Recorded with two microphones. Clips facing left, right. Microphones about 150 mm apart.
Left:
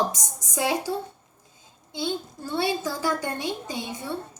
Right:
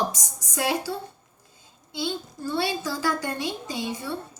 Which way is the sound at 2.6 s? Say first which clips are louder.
Left 2 dB; 20° left (ahead or behind).